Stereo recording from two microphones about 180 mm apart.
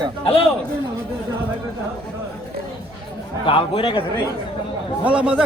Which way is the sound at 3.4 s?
30° left (ahead or behind).